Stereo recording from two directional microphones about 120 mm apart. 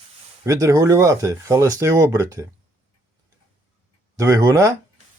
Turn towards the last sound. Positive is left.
turn(degrees=-30)  # may be behind; listen again after turning